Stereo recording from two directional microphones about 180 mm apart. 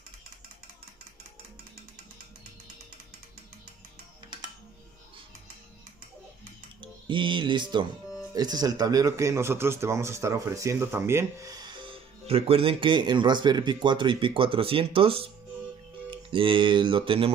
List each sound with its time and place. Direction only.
6.8 s speech: 25° right (ahead or behind)